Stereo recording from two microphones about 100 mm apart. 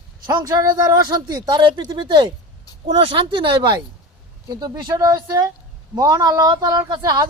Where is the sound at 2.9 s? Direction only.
70° right (ahead or behind).